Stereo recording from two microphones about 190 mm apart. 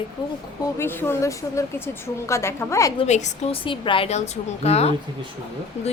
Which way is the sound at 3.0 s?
35° left (ahead or behind).